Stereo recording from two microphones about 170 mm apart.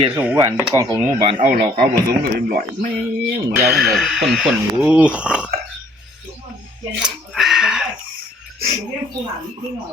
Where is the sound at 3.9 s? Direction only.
5° right (ahead or behind).